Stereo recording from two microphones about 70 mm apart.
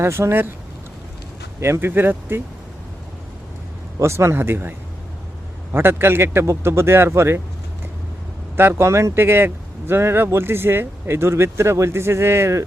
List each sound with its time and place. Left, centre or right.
0.0 s a man's voice: right
1.6 s a man's voice: right
4.0 s a man's voice: right
5.7 s a man's voice: right
8.5 s a man's voice: right